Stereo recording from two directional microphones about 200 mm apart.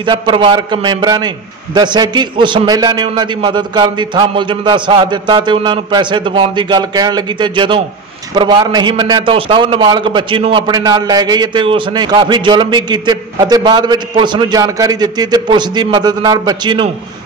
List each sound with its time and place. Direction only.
0.0 s a man's voice: 25° right (ahead or behind)